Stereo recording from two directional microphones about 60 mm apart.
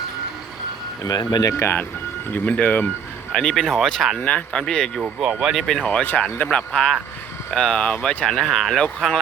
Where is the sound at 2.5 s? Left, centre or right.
Left.